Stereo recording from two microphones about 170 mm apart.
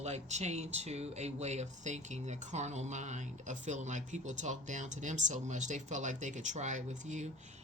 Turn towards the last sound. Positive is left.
turn(degrees=-45)  # may be behind; listen again after turning